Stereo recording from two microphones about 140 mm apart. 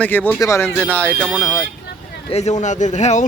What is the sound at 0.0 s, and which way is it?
Speech, 10° left (ahead or behind).